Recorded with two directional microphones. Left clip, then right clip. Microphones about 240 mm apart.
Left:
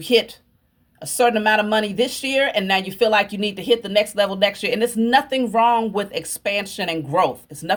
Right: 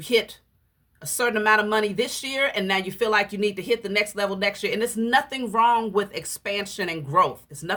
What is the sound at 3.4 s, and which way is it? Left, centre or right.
Speech, centre.